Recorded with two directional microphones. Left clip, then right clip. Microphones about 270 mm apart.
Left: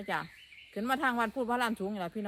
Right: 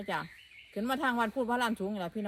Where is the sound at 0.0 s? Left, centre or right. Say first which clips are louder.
Even; centre.